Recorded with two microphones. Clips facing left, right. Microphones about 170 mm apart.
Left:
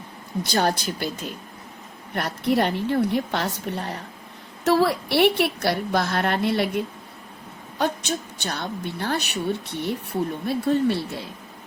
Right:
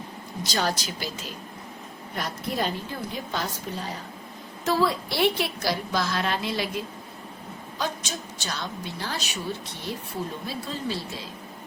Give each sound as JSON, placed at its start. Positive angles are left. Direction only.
{"t": 0.4, "sound": "a woman's voice", "side_deg": 55}
{"t": 2.1, "sound": "a woman's voice", "side_deg": 65}